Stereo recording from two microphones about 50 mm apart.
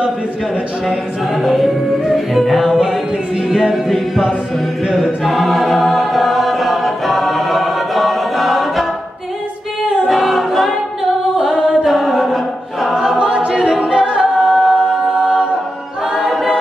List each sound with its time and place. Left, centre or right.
0.8 s music: centre
3.4 s a capella: centre
4.8 s choir: centre
10.0 s a capella: centre
11.3 s singing: centre
11.8 s a capella: centre
12.8 s choir: centre
13.2 s a capella: centre
16.2 s a capella: centre